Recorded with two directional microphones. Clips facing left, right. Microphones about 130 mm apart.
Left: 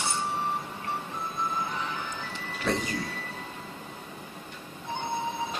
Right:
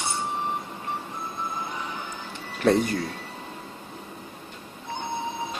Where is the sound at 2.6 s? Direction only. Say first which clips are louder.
Right 9 dB; 55° right (ahead or behind).